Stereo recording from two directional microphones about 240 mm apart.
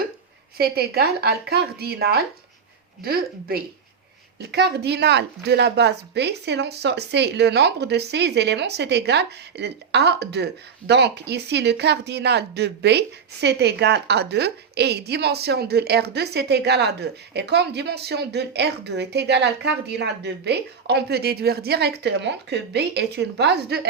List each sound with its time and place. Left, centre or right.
0.5 s speech: right